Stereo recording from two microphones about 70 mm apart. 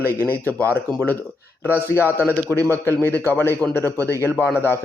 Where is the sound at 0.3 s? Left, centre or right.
Right.